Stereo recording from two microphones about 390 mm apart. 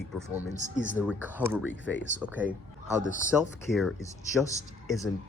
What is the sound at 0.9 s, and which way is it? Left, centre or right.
Speech, centre.